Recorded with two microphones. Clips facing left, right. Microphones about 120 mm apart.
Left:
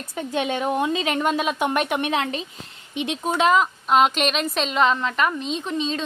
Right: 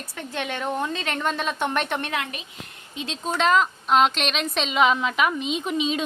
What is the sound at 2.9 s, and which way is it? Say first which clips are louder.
A woman's voice: left 4 dB; 15° left (ahead or behind).